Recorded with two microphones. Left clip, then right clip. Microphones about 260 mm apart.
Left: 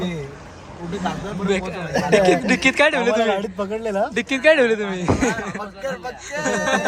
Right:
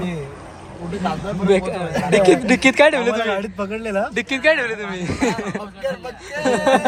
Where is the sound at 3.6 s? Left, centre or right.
Left.